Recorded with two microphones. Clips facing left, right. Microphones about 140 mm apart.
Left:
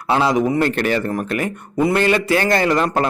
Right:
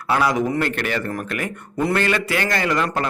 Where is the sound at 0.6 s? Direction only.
30° left (ahead or behind).